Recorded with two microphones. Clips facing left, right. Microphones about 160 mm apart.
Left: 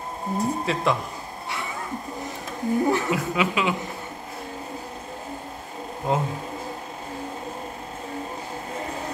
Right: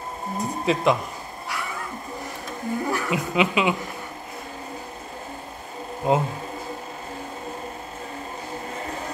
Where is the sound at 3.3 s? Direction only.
20° right (ahead or behind).